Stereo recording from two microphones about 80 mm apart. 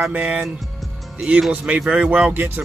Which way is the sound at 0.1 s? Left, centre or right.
Centre.